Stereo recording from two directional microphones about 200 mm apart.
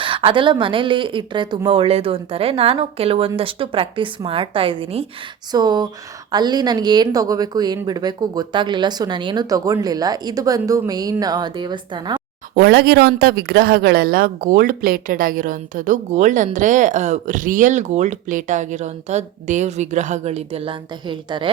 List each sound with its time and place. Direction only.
0.0 s speech: 25° right (ahead or behind)
12.5 s speech: 50° right (ahead or behind); by 21.5 s 25° right (ahead or behind)